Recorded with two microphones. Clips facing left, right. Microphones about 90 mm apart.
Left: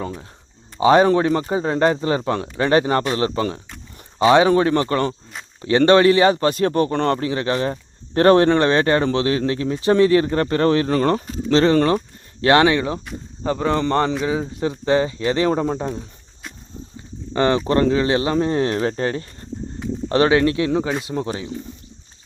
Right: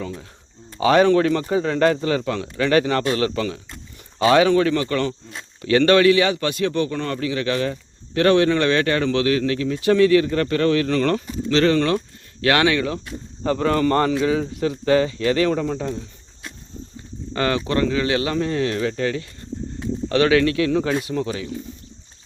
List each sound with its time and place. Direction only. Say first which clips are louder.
0.8 s a man's voice: left 1 dB; 30° left (ahead or behind); by 7.2 s 45° left (ahead or behind)
7.2 s a man's voice: left 1 dB; 35° left (ahead or behind)
13.4 s speech: right 1 dB; 15° left (ahead or behind); by 16.0 s 30° left (ahead or behind)
17.3 s a man's voice: left 4 dB; 25° left (ahead or behind)